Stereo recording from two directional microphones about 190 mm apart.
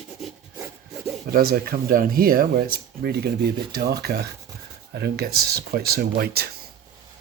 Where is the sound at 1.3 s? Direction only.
50° right (ahead or behind).